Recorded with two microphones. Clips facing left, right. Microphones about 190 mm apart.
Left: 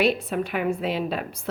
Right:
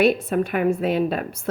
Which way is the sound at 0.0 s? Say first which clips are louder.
Right 4 dB; 50° right (ahead or behind).